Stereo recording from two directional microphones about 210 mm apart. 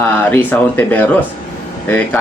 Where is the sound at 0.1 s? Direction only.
10° left (ahead or behind).